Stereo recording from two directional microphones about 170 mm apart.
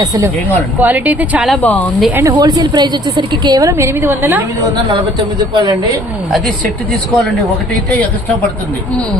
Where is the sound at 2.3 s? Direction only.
25° right (ahead or behind).